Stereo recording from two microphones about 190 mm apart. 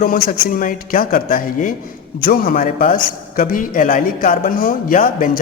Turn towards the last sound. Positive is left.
turn(degrees=45)  # may be behind; listen again after turning